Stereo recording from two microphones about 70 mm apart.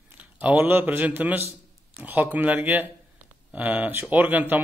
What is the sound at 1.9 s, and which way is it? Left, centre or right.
A man's voice, right.